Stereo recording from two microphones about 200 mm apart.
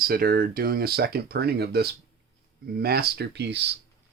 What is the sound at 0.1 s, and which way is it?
Speech, 50° right (ahead or behind).